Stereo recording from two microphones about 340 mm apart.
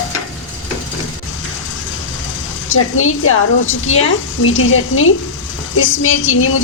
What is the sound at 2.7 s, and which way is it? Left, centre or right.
A woman's voice, left.